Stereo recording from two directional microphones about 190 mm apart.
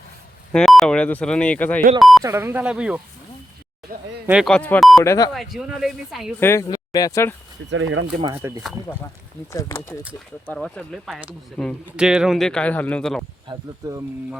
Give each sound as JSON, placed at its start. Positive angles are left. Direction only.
{"t": 0.5, "sound": "speech", "side_deg": 0}
{"t": 2.2, "sound": "speech", "side_deg": -15}
{"t": 3.9, "sound": "speech", "side_deg": -50}
{"t": 4.3, "sound": "speech", "side_deg": 0}
{"t": 5.0, "sound": "speech", "side_deg": 15}
{"t": 5.3, "sound": "speech", "side_deg": 0}
{"t": 6.4, "sound": "speech", "side_deg": 15}
{"t": 7.7, "sound": "speech", "side_deg": -90}
{"t": 8.4, "sound": "speech", "side_deg": -15}
{"t": 9.5, "sound": "speech", "side_deg": 15}
{"t": 13.5, "sound": "speech", "side_deg": -20}